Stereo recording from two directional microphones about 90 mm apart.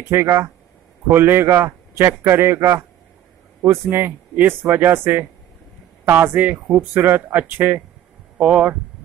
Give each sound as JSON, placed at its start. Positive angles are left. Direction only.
{"t": 0.1, "sound": "a man's voice", "side_deg": -30}
{"t": 3.9, "sound": "a man's voice", "side_deg": -25}